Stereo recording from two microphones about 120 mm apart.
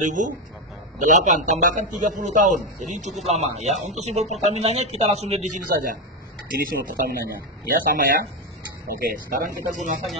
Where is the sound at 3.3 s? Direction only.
70° right (ahead or behind).